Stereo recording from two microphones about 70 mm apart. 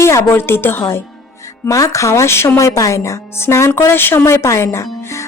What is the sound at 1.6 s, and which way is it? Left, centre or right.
Speech, left.